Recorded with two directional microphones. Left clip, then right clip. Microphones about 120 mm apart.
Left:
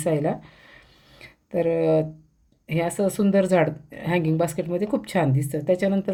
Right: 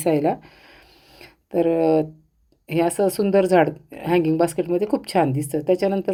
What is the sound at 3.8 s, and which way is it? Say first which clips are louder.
Speech: right 5 dB; 60° right (ahead or behind).